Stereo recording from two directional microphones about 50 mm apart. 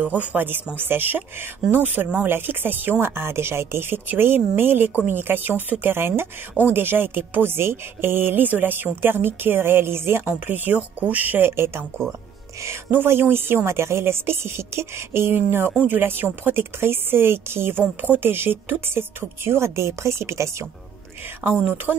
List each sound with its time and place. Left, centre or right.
0.0 s speech: right
0.7 s speech: right
10.2 s speech: right
11.4 s a woman's voice: right
21.5 s speech: right